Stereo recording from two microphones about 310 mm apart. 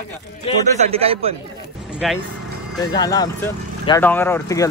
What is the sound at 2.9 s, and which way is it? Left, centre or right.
Speech, centre.